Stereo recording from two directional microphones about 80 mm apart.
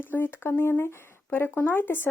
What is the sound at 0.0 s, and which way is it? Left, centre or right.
Speech, left.